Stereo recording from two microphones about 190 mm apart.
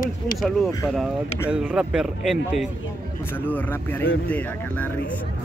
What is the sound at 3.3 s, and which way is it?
Speech, 10° left (ahead or behind).